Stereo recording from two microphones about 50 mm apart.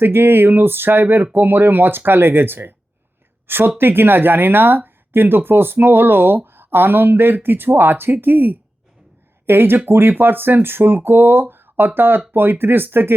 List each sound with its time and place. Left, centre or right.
0.0 s speech: right